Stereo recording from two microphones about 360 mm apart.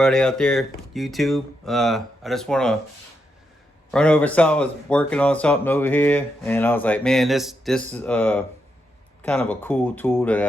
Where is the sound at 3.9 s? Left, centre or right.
Centre.